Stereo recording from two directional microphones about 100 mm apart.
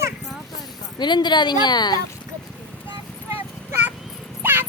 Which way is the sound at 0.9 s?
50° left (ahead or behind).